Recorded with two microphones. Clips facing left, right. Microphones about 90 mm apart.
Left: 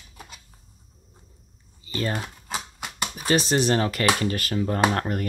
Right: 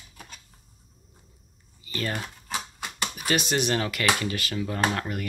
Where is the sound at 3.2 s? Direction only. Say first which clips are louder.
Left 4 dB; 35° left (ahead or behind).